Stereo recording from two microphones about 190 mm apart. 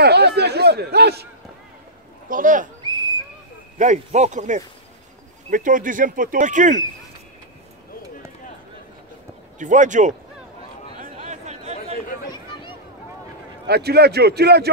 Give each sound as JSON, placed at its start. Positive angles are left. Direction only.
{"t": 0.0, "sound": "speech", "side_deg": -60}
{"t": 2.2, "sound": "speech", "side_deg": -45}
{"t": 3.7, "sound": "speech", "side_deg": -40}
{"t": 9.6, "sound": "speech", "side_deg": -40}
{"t": 11.2, "sound": "a sound", "side_deg": -35}
{"t": 12.3, "sound": "a sound", "side_deg": 25}
{"t": 13.7, "sound": "speech", "side_deg": -60}